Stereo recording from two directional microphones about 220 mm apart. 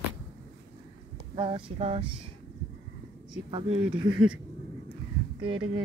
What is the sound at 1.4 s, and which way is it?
Speech, 25° right (ahead or behind).